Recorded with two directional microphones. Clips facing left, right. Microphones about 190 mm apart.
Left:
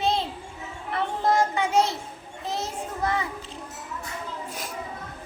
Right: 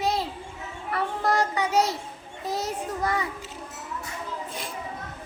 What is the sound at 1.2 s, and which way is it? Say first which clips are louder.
Child singing: left 2 dB; 25° left (ahead or behind).